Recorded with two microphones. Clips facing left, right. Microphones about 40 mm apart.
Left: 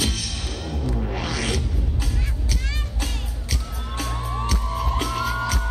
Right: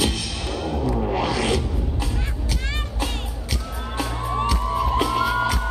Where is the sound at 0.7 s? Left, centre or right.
Right.